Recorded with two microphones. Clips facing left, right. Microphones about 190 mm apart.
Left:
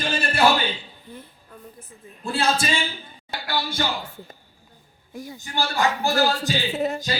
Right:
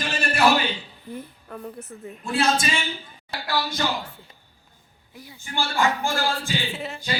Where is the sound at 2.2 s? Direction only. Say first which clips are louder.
Even; 30° left (ahead or behind).